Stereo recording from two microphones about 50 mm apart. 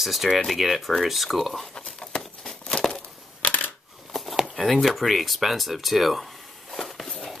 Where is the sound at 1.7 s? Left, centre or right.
Centre.